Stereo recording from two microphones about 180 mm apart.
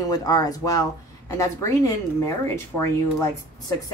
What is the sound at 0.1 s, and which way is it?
Speech, 20° left (ahead or behind).